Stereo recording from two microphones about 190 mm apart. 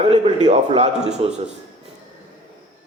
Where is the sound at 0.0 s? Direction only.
35° right (ahead or behind).